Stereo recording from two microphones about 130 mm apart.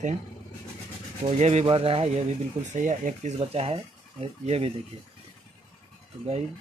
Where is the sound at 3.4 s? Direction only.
50° right (ahead or behind).